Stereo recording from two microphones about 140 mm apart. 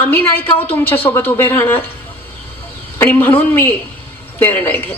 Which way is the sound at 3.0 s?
15° left (ahead or behind).